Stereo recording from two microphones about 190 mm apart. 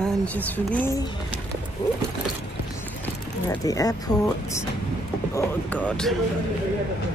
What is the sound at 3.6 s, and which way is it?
Speech, 20° left (ahead or behind).